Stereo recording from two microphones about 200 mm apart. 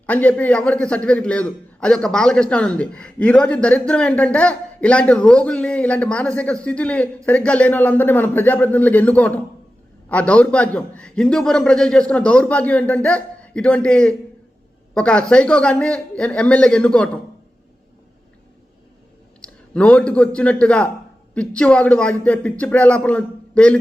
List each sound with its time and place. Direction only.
0.0 s a man's voice: 5° left (ahead or behind)
19.4 s a man's voice: 5° left (ahead or behind)